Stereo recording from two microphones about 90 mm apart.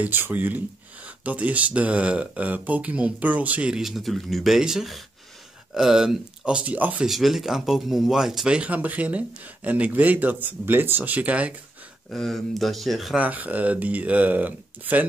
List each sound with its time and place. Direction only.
0.0 s speech: 20° right (ahead or behind)
7.1 s speech: centre (ahead or behind)
12.1 s speech: centre (ahead or behind)
13.2 s speech: 20° right (ahead or behind)